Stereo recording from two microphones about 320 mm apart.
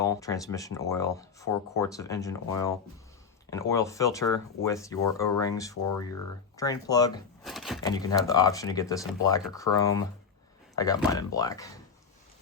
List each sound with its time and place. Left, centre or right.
0.0 s speech: centre
5.7 s speech: left
6.6 s speech: centre
7.4 s speech: centre
7.8 s speech: centre
9.7 s speech: left
10.8 s speech: centre